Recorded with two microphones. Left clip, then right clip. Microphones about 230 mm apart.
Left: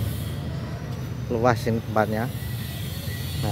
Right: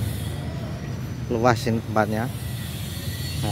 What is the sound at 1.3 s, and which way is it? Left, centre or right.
Speech, centre.